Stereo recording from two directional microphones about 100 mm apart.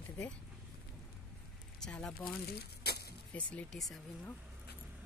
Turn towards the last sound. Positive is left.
turn(degrees=5)  # may be behind; listen again after turning